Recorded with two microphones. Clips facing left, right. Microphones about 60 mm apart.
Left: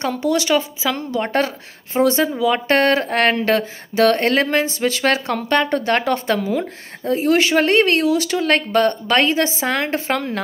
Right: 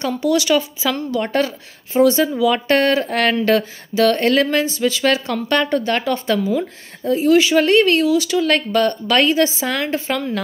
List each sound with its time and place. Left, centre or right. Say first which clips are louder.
0.0 s speech: right 1 dB; left
2.8 s speech: left 1 dB; left